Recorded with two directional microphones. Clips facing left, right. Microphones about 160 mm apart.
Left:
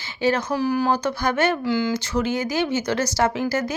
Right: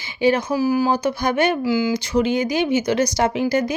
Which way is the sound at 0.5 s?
5° right (ahead or behind).